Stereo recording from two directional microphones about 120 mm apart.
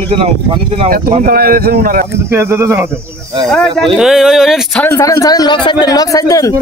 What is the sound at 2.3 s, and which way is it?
Speech, 20° right (ahead or behind).